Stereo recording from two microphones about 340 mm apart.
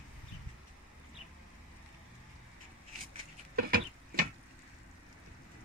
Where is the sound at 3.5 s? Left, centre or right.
Right.